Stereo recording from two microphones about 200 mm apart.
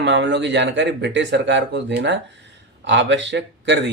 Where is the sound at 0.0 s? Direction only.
60° right (ahead or behind).